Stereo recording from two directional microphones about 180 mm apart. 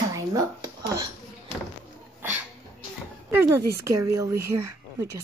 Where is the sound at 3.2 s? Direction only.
10° right (ahead or behind).